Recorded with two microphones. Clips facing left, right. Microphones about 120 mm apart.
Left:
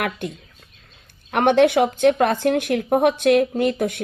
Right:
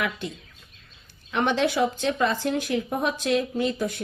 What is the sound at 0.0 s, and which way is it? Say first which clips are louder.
Speech: left 4 dB; 55° left (ahead or behind).